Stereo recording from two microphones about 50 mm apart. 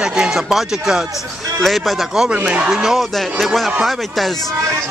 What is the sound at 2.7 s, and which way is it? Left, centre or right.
Speech, centre.